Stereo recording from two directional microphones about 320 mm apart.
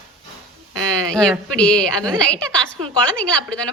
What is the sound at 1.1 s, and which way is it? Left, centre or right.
A woman's voice, centre.